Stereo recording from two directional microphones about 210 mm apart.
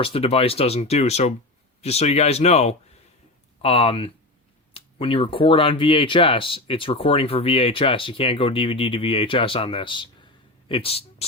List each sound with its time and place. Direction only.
0.0 s speech: 25° left (ahead or behind)